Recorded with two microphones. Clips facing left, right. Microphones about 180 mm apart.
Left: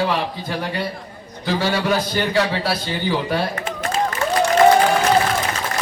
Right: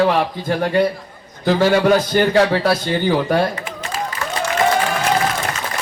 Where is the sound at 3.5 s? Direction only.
45° left (ahead or behind).